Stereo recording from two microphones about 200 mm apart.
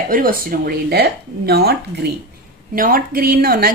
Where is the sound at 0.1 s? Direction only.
45° right (ahead or behind).